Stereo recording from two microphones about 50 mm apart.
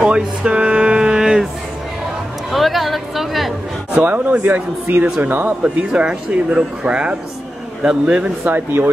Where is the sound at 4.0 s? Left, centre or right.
Right.